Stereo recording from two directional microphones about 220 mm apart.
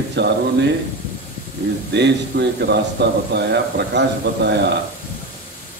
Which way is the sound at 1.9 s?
50° right (ahead or behind).